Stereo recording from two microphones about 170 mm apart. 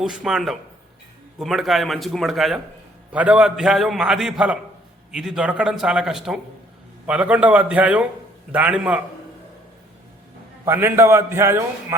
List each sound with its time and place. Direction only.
0.0 s a man's voice: 5° right (ahead or behind)
10.7 s a man's voice: 15° right (ahead or behind)